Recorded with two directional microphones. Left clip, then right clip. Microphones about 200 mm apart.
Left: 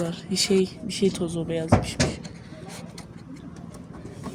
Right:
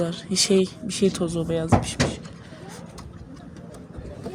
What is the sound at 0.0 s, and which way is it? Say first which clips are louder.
Speech: right 3 dB; 25° right (ahead or behind).